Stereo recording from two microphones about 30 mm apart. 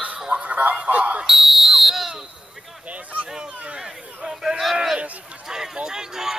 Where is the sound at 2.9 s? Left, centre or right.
Right.